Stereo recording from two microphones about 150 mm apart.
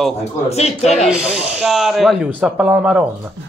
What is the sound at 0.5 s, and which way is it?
Speech, 45° left (ahead or behind).